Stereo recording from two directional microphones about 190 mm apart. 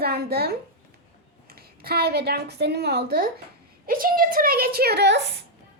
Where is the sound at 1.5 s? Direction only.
55° right (ahead or behind).